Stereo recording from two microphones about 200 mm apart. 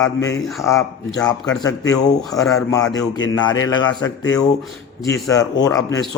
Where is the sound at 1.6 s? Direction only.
15° left (ahead or behind).